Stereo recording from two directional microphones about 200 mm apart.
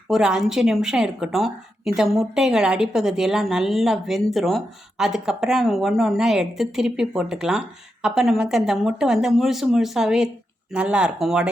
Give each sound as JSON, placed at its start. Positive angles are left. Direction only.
{"t": 0.1, "sound": "a woman's voice", "side_deg": -5}